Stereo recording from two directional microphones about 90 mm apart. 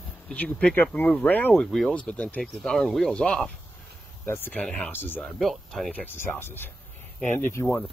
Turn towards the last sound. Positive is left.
turn(degrees=25)  # may be behind; listen again after turning